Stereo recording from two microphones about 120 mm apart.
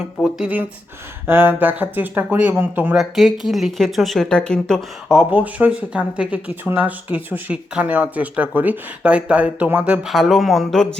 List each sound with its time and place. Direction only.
0.3 s speech: 10° right (ahead or behind)
3.0 s speech: centre (ahead or behind)
5.1 s speech: 15° right (ahead or behind)